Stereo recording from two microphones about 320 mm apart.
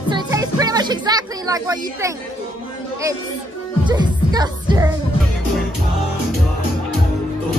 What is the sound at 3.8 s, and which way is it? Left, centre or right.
Music, centre.